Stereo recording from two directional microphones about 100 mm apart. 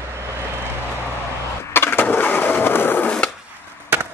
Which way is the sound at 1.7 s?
20° left (ahead or behind).